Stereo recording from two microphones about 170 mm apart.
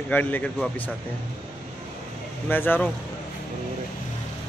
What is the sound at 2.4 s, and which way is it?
Speech, 10° left (ahead or behind).